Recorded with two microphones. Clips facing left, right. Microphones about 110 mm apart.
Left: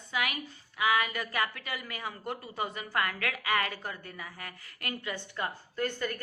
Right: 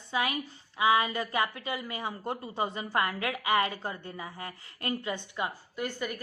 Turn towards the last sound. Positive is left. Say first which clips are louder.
# left 1 dB
turn(degrees=-15)  # may be behind; listen again after turning